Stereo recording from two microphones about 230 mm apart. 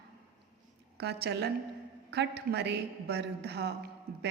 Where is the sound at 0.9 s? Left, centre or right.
Right.